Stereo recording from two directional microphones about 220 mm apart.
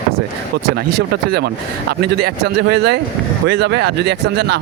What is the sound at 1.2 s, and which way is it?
Speech, 45° right (ahead or behind).